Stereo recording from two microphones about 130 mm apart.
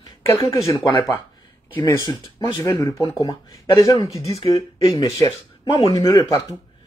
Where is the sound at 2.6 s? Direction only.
25° left (ahead or behind).